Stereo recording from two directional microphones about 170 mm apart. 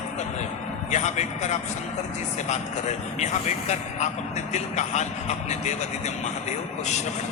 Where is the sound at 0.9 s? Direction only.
45° left (ahead or behind).